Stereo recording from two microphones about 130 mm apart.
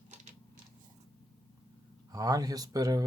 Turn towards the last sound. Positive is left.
turn(degrees=-30)  # may be behind; listen again after turning